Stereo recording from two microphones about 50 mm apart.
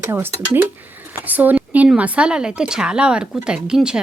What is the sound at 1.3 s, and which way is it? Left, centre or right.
A woman's voice, right.